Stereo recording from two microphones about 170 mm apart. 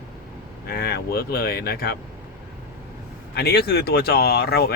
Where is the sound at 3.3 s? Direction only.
70° left (ahead or behind).